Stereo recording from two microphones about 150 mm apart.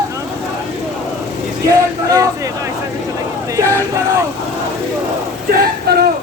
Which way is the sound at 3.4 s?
20° right (ahead or behind).